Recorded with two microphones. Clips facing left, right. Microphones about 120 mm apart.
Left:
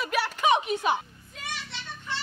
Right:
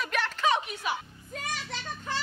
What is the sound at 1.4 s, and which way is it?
Children playing, 45° right (ahead or behind).